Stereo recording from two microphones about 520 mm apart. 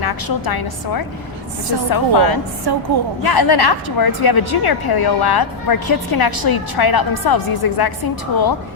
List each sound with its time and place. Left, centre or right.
0.0 s a woman's voice: left
2.7 s a woman's voice: right
3.2 s a woman's voice: left